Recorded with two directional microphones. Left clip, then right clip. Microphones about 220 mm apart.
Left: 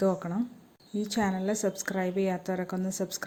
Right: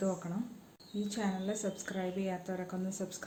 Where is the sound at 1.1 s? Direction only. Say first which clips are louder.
Left 8 dB; 45° left (ahead or behind).